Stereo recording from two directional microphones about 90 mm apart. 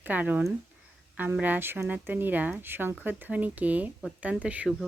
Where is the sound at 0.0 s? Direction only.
20° right (ahead or behind).